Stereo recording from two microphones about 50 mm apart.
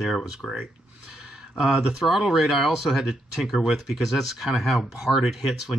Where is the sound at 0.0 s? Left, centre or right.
Centre.